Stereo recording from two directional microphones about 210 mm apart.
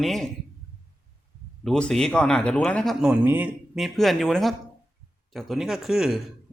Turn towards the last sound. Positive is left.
turn(degrees=0)  # may be behind; listen again after turning